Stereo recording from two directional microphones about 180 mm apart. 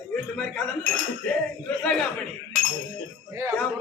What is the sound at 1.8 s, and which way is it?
Speech, 5° left (ahead or behind).